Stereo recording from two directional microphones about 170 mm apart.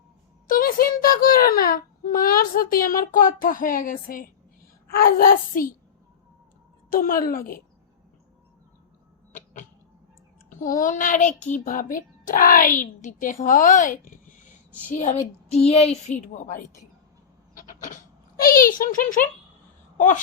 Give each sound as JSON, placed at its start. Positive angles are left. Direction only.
{"t": 0.4, "sound": "a sound", "side_deg": 55}
{"t": 1.0, "sound": "speech", "side_deg": 55}
{"t": 6.9, "sound": "speech", "side_deg": 55}
{"t": 10.5, "sound": "a child's voice", "side_deg": 50}
{"t": 14.8, "sound": "a child's voice", "side_deg": 40}
{"t": 17.6, "sound": "a sound", "side_deg": 50}
{"t": 20.0, "sound": "a child's voice", "side_deg": 50}